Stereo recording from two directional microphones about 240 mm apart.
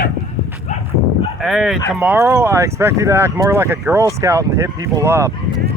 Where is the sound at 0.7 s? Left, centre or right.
Left.